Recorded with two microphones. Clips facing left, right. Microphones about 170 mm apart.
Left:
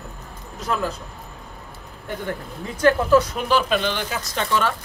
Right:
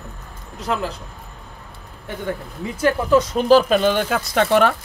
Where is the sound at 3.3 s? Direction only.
40° right (ahead or behind); by 4.7 s 65° right (ahead or behind).